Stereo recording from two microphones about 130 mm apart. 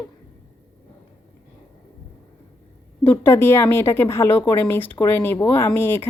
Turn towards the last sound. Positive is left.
turn(degrees=15)  # may be behind; listen again after turning